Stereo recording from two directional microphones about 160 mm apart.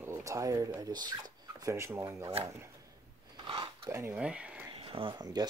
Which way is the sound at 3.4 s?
30° right (ahead or behind).